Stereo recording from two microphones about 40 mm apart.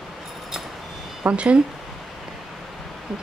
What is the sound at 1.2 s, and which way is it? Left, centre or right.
Speech, right.